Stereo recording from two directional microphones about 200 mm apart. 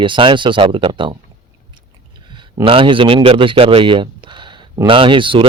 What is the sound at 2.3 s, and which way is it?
A man's voice, 25° right (ahead or behind).